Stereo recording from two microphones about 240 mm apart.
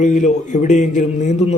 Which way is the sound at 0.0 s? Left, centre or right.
Left.